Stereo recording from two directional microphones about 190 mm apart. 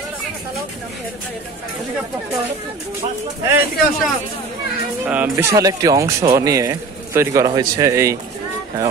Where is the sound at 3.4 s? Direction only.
15° right (ahead or behind).